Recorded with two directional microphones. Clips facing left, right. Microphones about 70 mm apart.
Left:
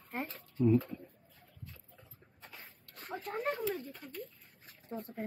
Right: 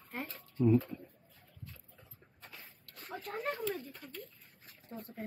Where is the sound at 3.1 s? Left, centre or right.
Centre.